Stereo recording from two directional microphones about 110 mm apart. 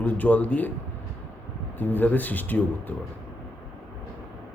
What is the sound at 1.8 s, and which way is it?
Speech, 15° left (ahead or behind).